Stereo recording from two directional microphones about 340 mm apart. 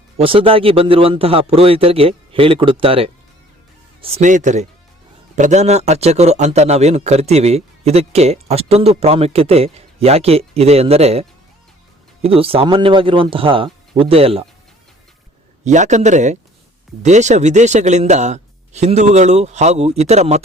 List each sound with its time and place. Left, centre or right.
0.2 s a man's voice: centre
15.6 s speech: right